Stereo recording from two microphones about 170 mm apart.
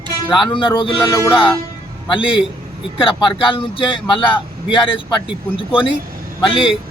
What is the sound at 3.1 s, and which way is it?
A man's voice, 30° left (ahead or behind).